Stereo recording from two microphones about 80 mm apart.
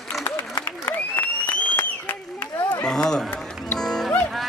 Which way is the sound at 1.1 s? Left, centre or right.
Left.